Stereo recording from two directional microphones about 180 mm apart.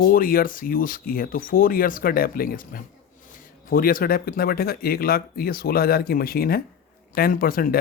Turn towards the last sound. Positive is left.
turn(degrees=55)  # may be behind; listen again after turning